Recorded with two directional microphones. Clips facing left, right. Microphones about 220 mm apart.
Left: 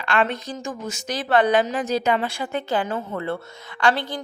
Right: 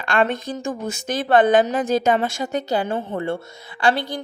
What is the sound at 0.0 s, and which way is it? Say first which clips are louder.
A woman's voice: right 2 dB; 45° right (ahead or behind).